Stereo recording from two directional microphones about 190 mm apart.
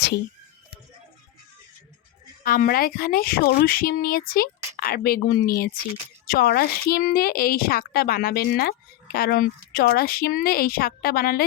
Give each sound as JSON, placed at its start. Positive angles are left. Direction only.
{"t": 2.4, "sound": "a woman's voice", "side_deg": 50}